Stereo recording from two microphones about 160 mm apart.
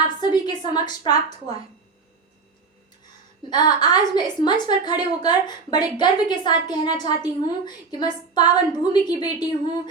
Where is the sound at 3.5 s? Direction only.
25° left (ahead or behind).